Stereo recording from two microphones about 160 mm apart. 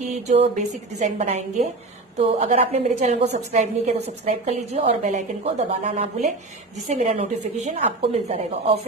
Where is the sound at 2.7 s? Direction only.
45° right (ahead or behind).